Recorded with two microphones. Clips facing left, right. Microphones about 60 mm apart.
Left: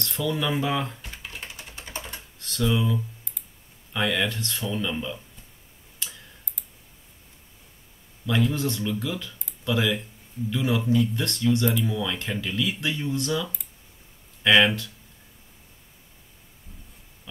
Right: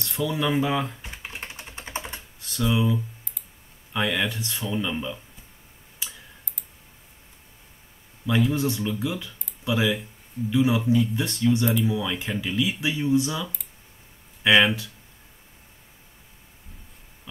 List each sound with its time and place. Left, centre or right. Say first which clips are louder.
0.0 s speech: right 1 dB; centre
1.0 s typing: right 2 dB; right
2.4 s speech: right 1 dB; centre
5.9 s tick: even; centre
8.3 s speech: right 2 dB; centre